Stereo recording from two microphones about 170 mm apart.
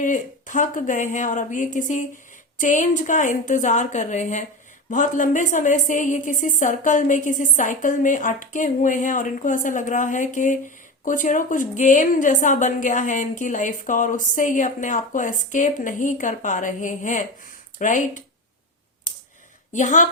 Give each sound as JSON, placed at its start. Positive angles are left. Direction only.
{"t": 0.0, "sound": "a woman's voice", "side_deg": 50}
{"t": 19.7, "sound": "a woman's voice", "side_deg": 45}